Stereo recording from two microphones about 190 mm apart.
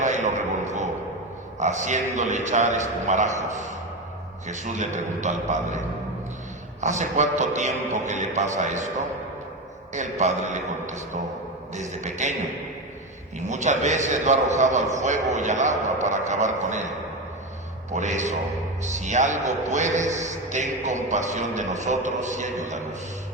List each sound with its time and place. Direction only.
0.0 s a sound: 40° right (ahead or behind)
1.5 s a man's voice: 40° right (ahead or behind)
6.8 s a man's voice: 40° right (ahead or behind)
9.9 s a man's voice: 40° right (ahead or behind)
13.5 s a man's voice: 40° right (ahead or behind)
17.9 s a man's voice: 40° right (ahead or behind)